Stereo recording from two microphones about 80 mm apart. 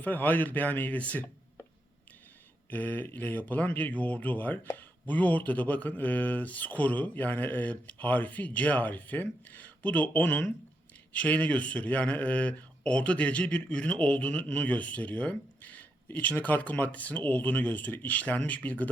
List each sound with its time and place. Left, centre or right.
0.0 s speech: left
2.6 s a sound: left
3.2 s speech: left